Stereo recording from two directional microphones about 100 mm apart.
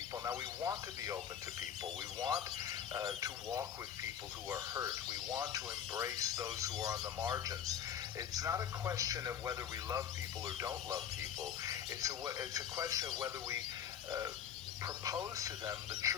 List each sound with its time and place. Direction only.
0.3 s a man's voice: 30° right (ahead or behind)
14.8 s a man's voice: 35° right (ahead or behind)